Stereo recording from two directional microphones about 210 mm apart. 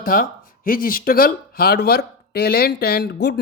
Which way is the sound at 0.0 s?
45° left (ahead or behind).